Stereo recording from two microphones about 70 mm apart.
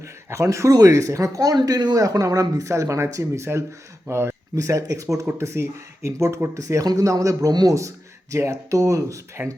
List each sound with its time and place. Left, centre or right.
0.0 s speech: right
0.7 s speech: right
1.5 s speech: right
7.8 s speech: right